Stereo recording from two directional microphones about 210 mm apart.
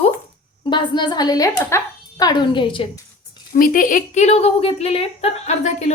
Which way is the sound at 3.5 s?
40° left (ahead or behind).